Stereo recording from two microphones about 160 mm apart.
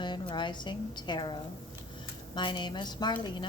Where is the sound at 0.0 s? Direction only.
30° left (ahead or behind).